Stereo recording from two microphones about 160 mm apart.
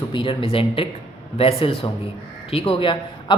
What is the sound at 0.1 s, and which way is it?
Speech, 35° left (ahead or behind).